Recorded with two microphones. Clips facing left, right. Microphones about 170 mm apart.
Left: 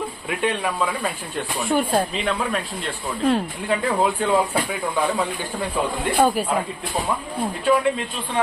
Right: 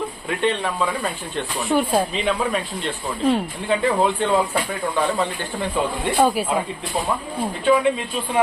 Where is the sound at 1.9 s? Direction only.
10° right (ahead or behind).